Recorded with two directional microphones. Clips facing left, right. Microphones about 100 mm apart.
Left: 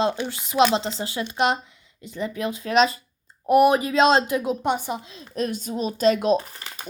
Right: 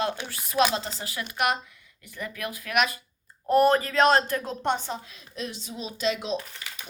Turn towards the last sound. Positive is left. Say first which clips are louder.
# left 3 dB
turn(degrees=40)  # may be behind; listen again after turning